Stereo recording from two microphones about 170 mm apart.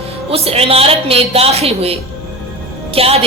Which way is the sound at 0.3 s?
35° right (ahead or behind).